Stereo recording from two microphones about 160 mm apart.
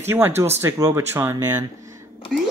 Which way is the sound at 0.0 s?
15° right (ahead or behind).